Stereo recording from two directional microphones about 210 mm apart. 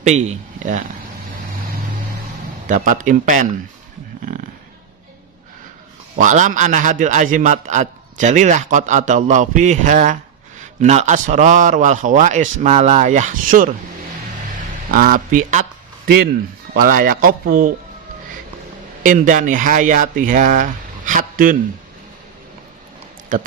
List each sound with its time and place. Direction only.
0.0 s speech: 35° right (ahead or behind)
2.6 s a man's voice: 40° right (ahead or behind)
6.1 s a man's voice: 35° right (ahead or behind)
14.8 s a man's voice: 40° right (ahead or behind)
16.7 s a man's voice: 40° right (ahead or behind)
19.0 s a man's voice: 40° right (ahead or behind)
23.3 s a man's voice: 40° right (ahead or behind)